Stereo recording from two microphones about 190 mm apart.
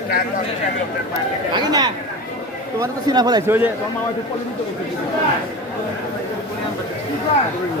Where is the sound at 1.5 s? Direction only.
20° right (ahead or behind).